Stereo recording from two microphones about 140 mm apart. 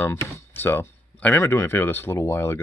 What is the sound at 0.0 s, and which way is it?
Speech, 15° left (ahead or behind).